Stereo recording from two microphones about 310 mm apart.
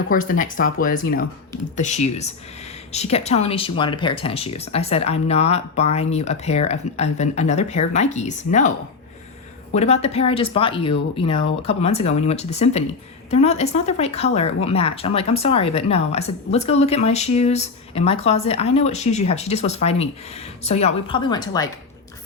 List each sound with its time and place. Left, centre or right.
0.1 s speech: left
9.7 s a woman's voice: left